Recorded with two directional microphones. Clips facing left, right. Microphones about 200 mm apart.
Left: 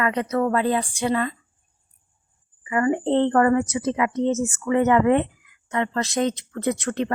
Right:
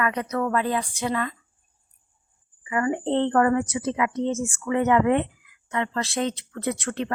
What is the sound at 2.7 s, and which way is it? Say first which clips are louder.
Speech: left 3 dB; 35° left (ahead or behind).